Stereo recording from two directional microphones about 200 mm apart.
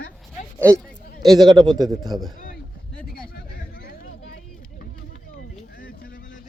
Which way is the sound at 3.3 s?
45° left (ahead or behind).